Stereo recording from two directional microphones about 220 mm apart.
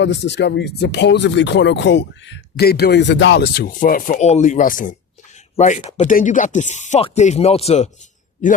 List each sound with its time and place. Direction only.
0.0 s speech: 50° left (ahead or behind); by 7.9 s 30° left (ahead or behind)